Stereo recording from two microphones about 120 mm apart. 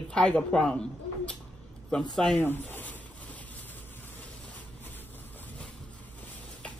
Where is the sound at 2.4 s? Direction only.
15° left (ahead or behind).